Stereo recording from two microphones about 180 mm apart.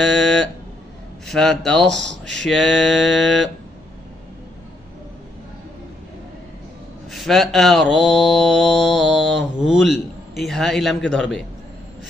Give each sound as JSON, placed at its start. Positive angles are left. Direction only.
{"t": 0.0, "sound": "a sound", "side_deg": 0}
{"t": 1.2, "sound": "mantra", "side_deg": 5}
{"t": 1.9, "sound": "speech", "side_deg": -80}
{"t": 2.3, "sound": "mantra", "side_deg": 5}
{"t": 7.1, "sound": "mantra", "side_deg": 0}